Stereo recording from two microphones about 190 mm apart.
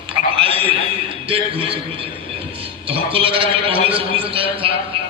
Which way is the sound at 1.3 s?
30° right (ahead or behind).